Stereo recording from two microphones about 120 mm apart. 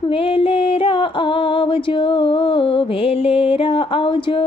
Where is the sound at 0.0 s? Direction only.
50° left (ahead or behind).